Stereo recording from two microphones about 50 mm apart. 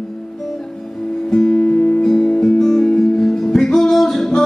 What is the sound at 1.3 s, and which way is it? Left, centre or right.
Music, centre.